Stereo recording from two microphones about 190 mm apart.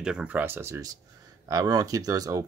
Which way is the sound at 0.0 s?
5° right (ahead or behind).